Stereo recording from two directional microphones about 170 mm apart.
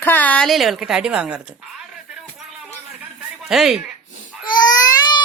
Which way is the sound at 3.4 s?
5° right (ahead or behind).